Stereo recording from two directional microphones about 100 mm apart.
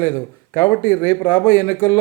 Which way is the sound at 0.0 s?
25° left (ahead or behind).